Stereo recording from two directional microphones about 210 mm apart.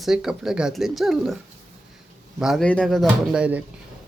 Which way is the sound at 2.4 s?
Centre (ahead or behind).